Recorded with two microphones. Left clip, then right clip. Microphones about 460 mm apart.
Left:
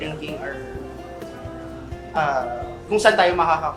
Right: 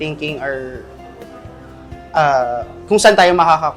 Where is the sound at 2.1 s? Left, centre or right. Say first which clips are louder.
Right 8 dB; right.